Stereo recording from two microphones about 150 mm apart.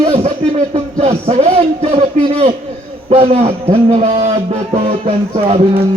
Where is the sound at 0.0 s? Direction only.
45° right (ahead or behind).